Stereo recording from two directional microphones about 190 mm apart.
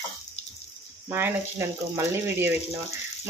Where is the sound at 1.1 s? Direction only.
15° right (ahead or behind).